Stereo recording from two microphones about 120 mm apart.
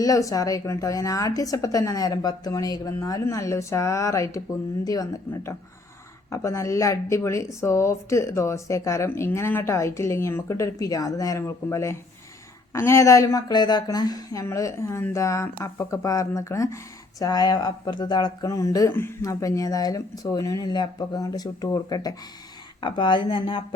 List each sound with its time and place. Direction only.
0.0 s a woman's voice: 30° left (ahead or behind)